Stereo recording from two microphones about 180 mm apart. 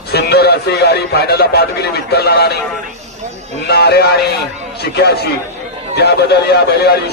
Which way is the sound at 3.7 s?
65° left (ahead or behind).